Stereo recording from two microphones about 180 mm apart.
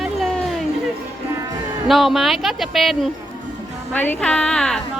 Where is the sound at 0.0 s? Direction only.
Centre (ahead or behind).